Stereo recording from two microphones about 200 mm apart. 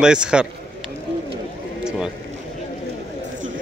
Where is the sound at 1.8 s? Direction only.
5° right (ahead or behind).